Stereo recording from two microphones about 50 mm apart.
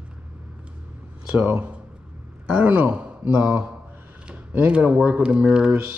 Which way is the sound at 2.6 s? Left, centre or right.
Right.